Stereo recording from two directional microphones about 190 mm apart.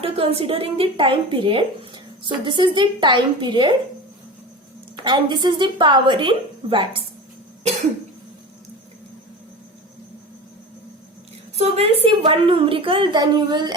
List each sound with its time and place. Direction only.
0.0 s a woman's voice: 30° right (ahead or behind)
5.0 s a woman's voice: 25° right (ahead or behind)
11.5 s a woman's voice: 30° right (ahead or behind)